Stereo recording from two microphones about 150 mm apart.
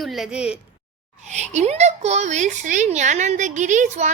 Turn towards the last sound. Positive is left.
turn(degrees=-55)  # may be behind; listen again after turning